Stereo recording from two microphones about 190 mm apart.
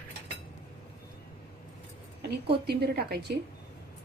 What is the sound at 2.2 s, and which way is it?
A woman's voice, 60° right (ahead or behind).